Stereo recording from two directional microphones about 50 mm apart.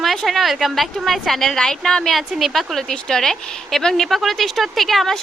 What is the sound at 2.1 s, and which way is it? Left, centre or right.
A woman's voice, centre.